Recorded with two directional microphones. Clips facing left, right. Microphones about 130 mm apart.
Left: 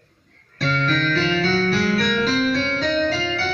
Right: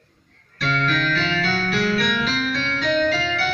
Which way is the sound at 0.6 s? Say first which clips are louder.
Left 1 dB; 35° left (ahead or behind).